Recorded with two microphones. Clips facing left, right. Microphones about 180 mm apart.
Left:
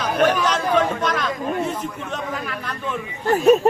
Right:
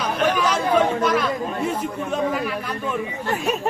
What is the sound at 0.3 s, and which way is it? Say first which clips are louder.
Chatter: even; 10° right (ahead or behind).